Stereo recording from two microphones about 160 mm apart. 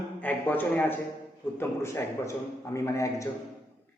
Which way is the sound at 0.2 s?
10° left (ahead or behind).